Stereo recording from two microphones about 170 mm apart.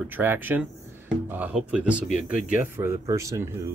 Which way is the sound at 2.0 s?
50° left (ahead or behind).